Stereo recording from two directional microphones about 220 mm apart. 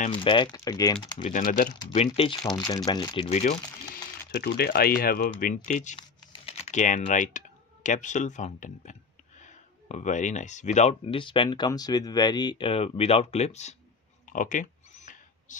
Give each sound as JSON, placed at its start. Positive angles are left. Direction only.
{"t": 0.1, "sound": "speech", "side_deg": 20}
{"t": 1.3, "sound": "speech", "side_deg": 40}
{"t": 1.8, "sound": "speech", "side_deg": 25}
{"t": 4.3, "sound": "speech", "side_deg": 45}
{"t": 14.2, "sound": "a sound", "side_deg": 35}